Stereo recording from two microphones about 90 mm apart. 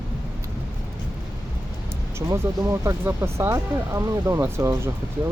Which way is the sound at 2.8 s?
30° right (ahead or behind).